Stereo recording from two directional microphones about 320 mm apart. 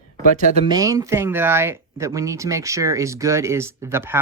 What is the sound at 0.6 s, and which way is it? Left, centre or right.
Speech, centre.